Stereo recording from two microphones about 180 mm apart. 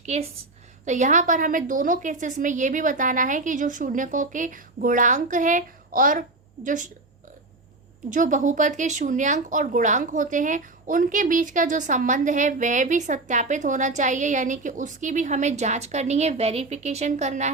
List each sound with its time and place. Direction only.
0.0 s a woman's voice: 40° right (ahead or behind)
8.1 s speech: 45° right (ahead or behind)